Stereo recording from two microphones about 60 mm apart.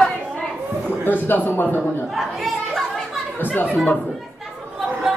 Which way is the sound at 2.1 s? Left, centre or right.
Centre.